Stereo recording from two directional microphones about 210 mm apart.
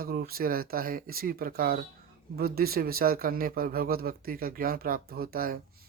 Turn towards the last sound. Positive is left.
turn(degrees=-45)  # may be behind; listen again after turning